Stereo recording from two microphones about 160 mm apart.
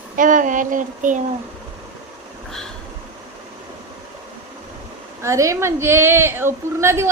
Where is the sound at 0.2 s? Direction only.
55° right (ahead or behind).